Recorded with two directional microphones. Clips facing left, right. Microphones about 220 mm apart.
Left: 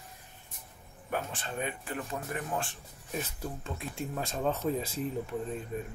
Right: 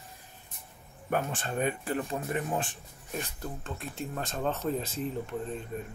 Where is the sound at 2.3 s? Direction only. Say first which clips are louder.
Right 3 dB; 20° right (ahead or behind).